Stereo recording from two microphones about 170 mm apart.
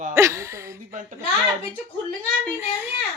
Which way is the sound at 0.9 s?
50° right (ahead or behind).